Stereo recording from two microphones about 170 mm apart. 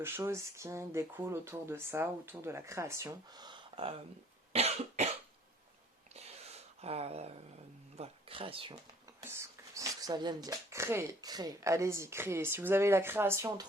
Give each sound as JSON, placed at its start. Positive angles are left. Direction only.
{"t": 0.0, "sound": "speech", "side_deg": -15}
{"t": 4.5, "sound": "cough", "side_deg": -35}
{"t": 6.1, "sound": "a sound", "side_deg": -40}
{"t": 7.9, "sound": "speech", "side_deg": -35}
{"t": 9.2, "sound": "speech", "side_deg": -15}